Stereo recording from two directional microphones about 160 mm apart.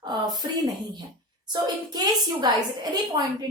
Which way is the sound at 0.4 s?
25° right (ahead or behind).